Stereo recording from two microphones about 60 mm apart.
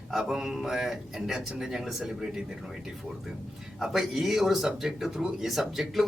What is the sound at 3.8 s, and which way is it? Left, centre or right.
Speech, centre.